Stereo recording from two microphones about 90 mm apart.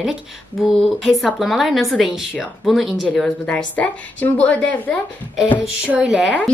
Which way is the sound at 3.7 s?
15° left (ahead or behind).